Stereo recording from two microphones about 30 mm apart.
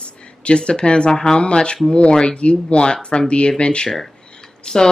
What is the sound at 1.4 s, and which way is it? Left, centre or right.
Speech, left.